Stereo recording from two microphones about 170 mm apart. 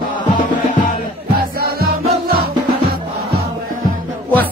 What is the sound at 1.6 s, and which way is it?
Music, 65° right (ahead or behind).